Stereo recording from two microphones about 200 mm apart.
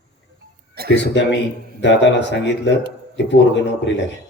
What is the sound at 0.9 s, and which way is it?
A man's voice, 60° left (ahead or behind).